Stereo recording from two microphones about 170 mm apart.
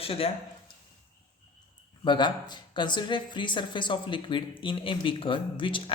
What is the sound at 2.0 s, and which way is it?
Speech, 25° left (ahead or behind).